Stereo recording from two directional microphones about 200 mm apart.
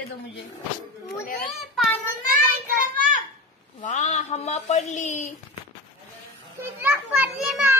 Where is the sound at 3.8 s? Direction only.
40° left (ahead or behind).